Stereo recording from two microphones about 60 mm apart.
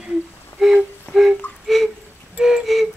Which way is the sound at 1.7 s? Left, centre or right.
Centre.